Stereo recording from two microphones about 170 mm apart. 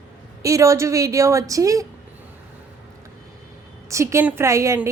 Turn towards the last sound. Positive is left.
turn(degrees=-15)  # may be behind; listen again after turning